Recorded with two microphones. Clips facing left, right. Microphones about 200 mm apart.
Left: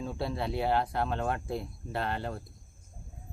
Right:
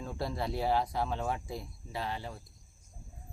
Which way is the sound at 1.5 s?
60° left (ahead or behind).